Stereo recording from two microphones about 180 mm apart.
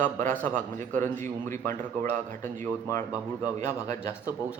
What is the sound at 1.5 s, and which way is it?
Speech, 15° left (ahead or behind).